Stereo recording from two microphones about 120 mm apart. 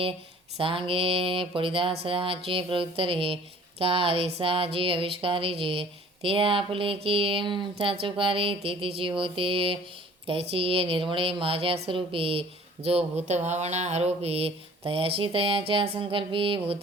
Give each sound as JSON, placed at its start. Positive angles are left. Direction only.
{"t": 0.5, "sound": "speech", "side_deg": -50}